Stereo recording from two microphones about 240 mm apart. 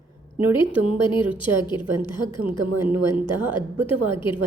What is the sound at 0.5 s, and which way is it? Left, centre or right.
A woman's voice, left.